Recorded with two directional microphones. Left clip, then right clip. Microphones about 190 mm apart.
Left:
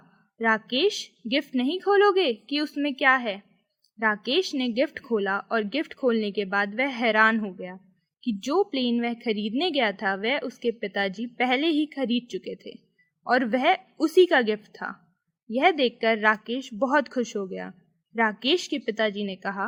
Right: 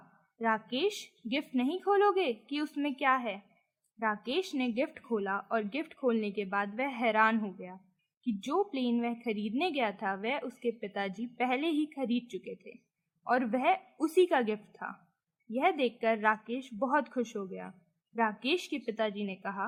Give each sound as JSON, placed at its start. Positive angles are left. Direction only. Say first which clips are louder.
{"t": 0.3, "sound": "a woman's voice", "louder": "left 8 dB", "side_deg": 20}